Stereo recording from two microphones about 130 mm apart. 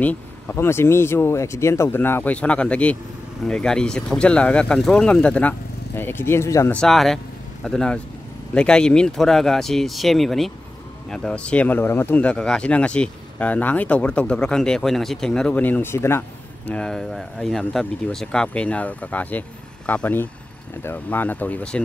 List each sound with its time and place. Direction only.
0.0 s speech: 15° left (ahead or behind)
6.7 s speech: 5° left (ahead or behind)